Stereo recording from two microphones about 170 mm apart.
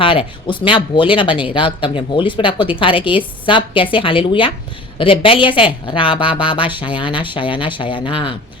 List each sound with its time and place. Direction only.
0.0 s speech: 30° left (ahead or behind)